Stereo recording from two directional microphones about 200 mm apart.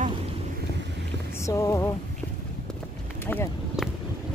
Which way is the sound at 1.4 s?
15° left (ahead or behind).